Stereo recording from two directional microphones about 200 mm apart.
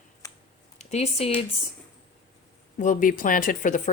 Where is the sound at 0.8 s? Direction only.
35° left (ahead or behind).